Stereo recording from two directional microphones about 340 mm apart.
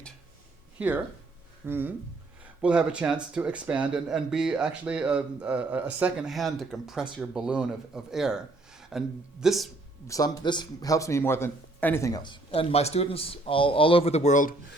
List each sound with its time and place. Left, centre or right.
0.8 s speech: centre
10.1 s speech: centre